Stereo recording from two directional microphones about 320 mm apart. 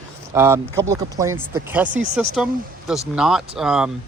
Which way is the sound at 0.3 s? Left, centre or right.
Centre.